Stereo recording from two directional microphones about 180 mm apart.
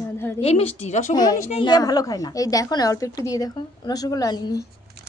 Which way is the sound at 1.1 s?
20° left (ahead or behind).